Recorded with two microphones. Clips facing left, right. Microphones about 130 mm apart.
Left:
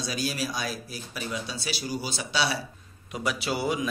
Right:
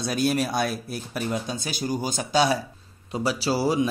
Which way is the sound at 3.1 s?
35° right (ahead or behind).